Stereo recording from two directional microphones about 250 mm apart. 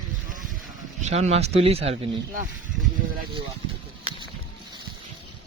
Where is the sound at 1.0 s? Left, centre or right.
Right.